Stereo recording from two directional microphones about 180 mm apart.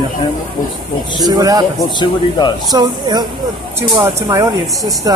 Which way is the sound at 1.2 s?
20° right (ahead or behind).